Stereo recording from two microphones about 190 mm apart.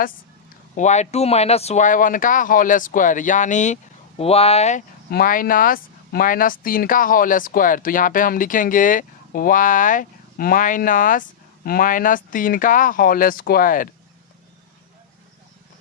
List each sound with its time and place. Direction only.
0.8 s speech: 40° left (ahead or behind)
5.1 s speech: 45° left (ahead or behind)